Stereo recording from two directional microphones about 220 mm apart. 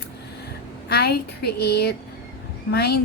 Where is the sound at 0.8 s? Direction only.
45° left (ahead or behind).